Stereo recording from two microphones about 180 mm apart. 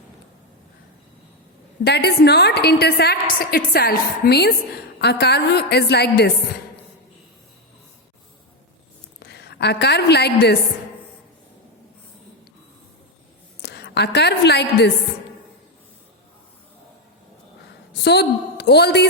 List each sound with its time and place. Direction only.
1.8 s a woman's voice: 65° left (ahead or behind)
9.2 s a woman's voice: 65° left (ahead or behind)
13.6 s a woman's voice: 65° left (ahead or behind)
17.9 s a woman's voice: 65° left (ahead or behind)